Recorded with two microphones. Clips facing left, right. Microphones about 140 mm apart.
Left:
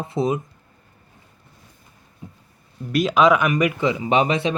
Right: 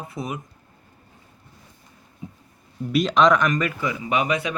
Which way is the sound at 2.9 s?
5° left (ahead or behind).